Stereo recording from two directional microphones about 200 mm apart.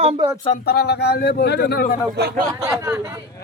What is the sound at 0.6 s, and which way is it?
Speech, 55° left (ahead or behind).